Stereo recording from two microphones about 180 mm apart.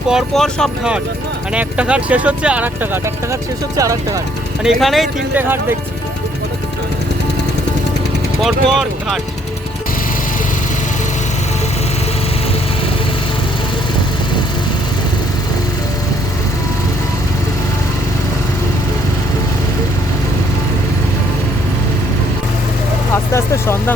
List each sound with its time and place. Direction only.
0.1 s speech: centre (ahead or behind)
3.8 s speech: 20° right (ahead or behind)
4.6 s speech: centre (ahead or behind)
8.4 s speech: centre (ahead or behind)
23.3 s speech: 15° left (ahead or behind)